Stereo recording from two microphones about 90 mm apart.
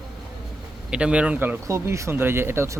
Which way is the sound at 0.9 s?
10° right (ahead or behind).